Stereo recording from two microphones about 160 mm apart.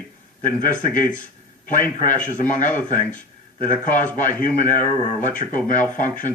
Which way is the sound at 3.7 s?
55° left (ahead or behind).